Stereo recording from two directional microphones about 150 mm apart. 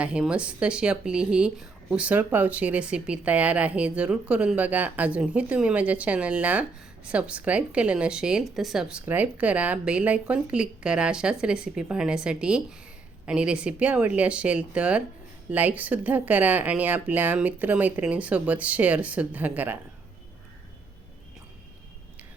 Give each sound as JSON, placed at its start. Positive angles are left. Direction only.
{"t": 0.0, "sound": "speech", "side_deg": -5}